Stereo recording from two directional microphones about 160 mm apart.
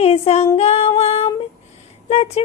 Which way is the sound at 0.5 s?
40° left (ahead or behind).